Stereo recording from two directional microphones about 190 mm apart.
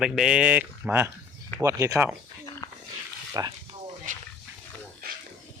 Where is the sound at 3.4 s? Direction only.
20° right (ahead or behind).